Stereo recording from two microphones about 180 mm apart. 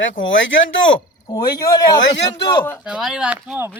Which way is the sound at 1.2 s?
20° left (ahead or behind).